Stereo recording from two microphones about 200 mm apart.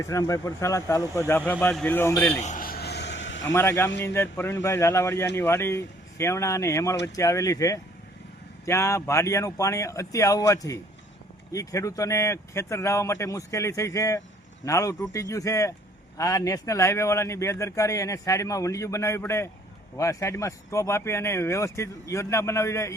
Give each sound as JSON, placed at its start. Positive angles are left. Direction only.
{"t": 0.0, "sound": "speech", "side_deg": 15}
{"t": 2.4, "sound": "a sound", "side_deg": 40}
{"t": 3.5, "sound": "speech", "side_deg": 15}